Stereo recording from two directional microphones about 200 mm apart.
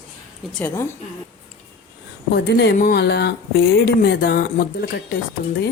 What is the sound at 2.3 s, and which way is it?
A woman's voice, 55° left (ahead or behind).